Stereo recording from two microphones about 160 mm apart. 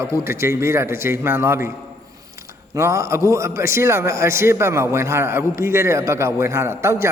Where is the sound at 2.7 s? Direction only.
20° right (ahead or behind).